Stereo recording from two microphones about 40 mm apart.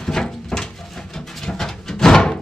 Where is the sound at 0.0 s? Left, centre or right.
Centre.